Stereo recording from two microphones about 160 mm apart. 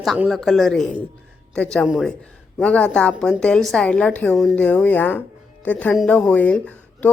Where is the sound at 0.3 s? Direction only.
Centre (ahead or behind).